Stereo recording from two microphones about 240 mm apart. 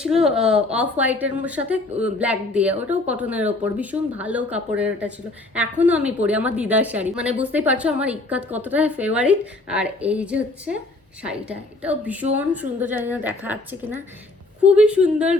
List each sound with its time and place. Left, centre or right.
0.0 s a woman's voice: centre